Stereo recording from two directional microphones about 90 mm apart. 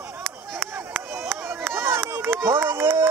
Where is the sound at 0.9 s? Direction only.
5° right (ahead or behind).